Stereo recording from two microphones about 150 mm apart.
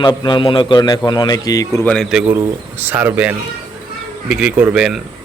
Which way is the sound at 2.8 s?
15° right (ahead or behind).